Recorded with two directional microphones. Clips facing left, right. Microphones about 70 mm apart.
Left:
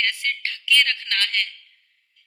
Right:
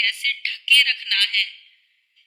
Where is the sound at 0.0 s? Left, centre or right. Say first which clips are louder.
Even; left.